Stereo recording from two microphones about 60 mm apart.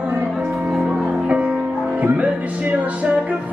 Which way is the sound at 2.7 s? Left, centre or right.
Right.